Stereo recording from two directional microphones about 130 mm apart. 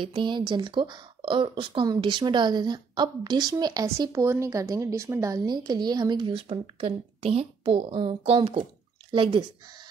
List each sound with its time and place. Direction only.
0.0 s speech: 40° right (ahead or behind)